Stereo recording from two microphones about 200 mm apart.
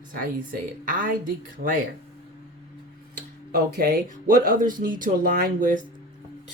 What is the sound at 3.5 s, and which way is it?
Speech, 50° right (ahead or behind).